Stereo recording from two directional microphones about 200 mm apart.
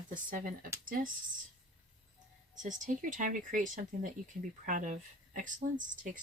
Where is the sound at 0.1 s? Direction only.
40° right (ahead or behind).